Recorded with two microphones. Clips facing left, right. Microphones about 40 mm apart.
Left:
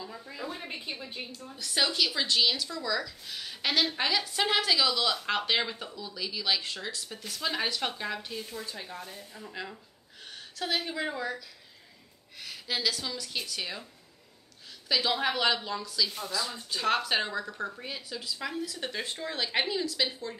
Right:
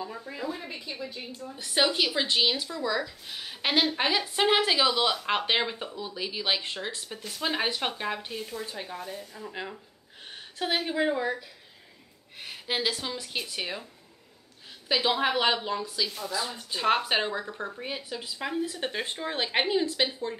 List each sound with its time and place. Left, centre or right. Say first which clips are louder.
0.0 s a woman's voice: right 4 dB; centre
7.1 s a woman's voice: right 3 dB; centre
10.3 s a woman's voice: right 3 dB; right
14.9 s a woman's voice: right 3 dB; right